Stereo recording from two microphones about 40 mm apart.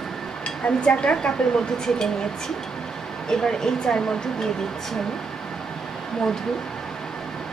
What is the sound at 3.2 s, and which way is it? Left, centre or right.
Speech, centre.